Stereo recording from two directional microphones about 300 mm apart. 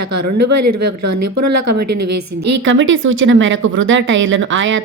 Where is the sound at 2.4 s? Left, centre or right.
Right.